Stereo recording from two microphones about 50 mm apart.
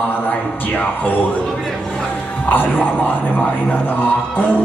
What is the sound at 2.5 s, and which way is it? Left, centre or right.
A man's voice, left.